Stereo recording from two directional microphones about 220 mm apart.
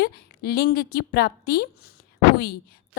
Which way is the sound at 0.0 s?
45° left (ahead or behind).